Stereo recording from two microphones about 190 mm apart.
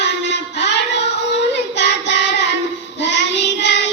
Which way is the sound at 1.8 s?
70° left (ahead or behind).